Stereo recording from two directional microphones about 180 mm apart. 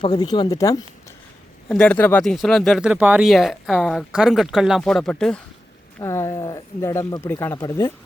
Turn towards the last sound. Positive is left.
turn(degrees=20)  # may be behind; listen again after turning